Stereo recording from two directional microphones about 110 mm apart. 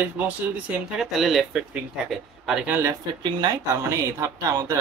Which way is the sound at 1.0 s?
Centre (ahead or behind).